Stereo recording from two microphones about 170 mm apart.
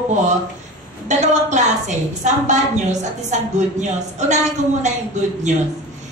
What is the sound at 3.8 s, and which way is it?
Speech, 45° right (ahead or behind).